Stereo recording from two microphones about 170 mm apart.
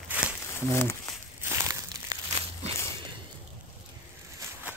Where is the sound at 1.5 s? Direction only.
15° right (ahead or behind).